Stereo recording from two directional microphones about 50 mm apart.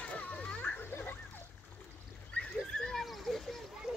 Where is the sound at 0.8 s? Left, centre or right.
Left.